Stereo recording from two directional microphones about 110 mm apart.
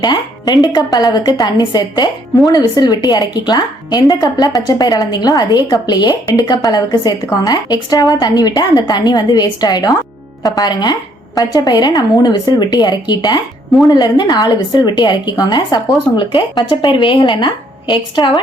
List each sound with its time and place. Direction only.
0.0 s a woman's voice: 40° left (ahead or behind)